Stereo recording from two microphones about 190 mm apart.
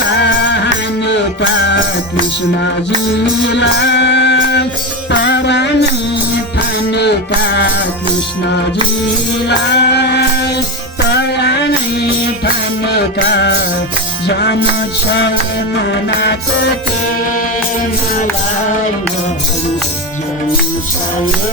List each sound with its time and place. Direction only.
0.2 s music: 65° left (ahead or behind)
3.5 s music: 65° left (ahead or behind)
6.9 s music: 60° left (ahead or behind)
9.5 s music: 60° left (ahead or behind)
12.9 s music: 60° left (ahead or behind)